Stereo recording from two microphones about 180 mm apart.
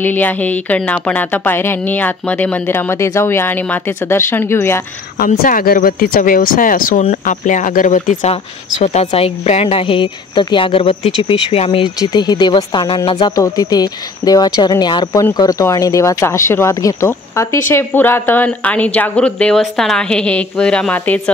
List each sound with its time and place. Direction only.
0.0 s speech: 10° left (ahead or behind)
5.2 s speech: 50° left (ahead or behind); by 21.2 s 10° left (ahead or behind)